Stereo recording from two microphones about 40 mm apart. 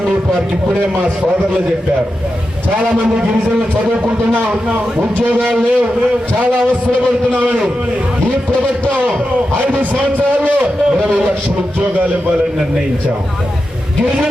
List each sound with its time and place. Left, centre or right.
5.5 s a man's voice: centre
7.3 s a man's voice: right
10.0 s a man's voice: right